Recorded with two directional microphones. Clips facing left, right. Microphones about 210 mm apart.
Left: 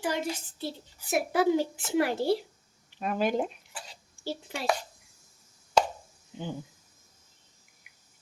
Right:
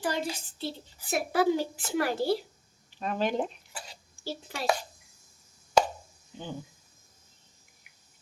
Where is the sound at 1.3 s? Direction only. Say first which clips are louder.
Even; 20° left (ahead or behind).